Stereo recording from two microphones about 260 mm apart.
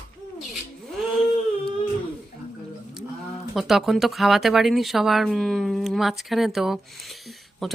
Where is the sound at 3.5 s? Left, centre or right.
Centre.